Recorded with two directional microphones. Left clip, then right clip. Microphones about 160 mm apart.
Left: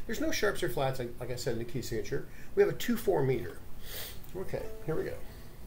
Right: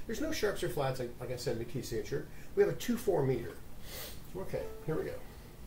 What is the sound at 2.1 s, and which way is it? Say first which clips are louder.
Speech: left 2 dB; 15° left (ahead or behind).